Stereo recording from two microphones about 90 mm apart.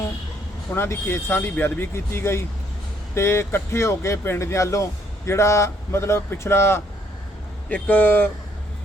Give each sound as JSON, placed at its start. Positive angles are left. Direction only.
{"t": 0.7, "sound": "speech", "side_deg": 25}